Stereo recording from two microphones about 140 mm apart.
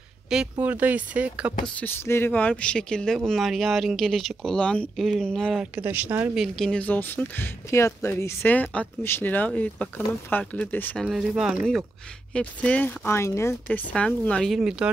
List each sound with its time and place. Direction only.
0.3 s speech: 5° right (ahead or behind)
1.8 s speech: 15° left (ahead or behind)
5.8 s speech: 15° right (ahead or behind)
6.3 s speech: centre (ahead or behind)
11.1 s speech: 5° right (ahead or behind)
12.3 s speech: 10° left (ahead or behind)
13.7 s speech: 10° left (ahead or behind)